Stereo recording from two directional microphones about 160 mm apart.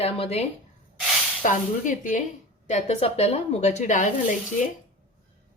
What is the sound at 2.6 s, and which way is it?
A woman's voice, 45° left (ahead or behind).